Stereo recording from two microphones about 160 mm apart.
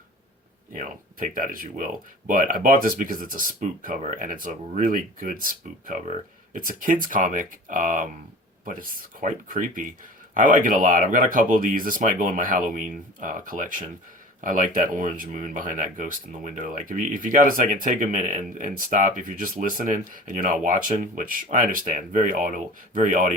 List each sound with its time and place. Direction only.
0.7 s speech: 55° right (ahead or behind)